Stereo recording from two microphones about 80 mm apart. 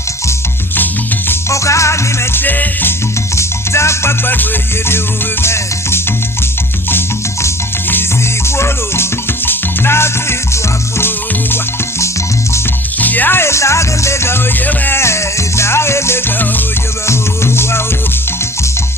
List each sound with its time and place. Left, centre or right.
1.3 s music: left
2.4 s music: left
3.3 s music: left
8.4 s music: left
13.0 s music: left